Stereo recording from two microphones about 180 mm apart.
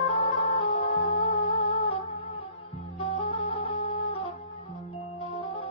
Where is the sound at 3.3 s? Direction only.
25° left (ahead or behind).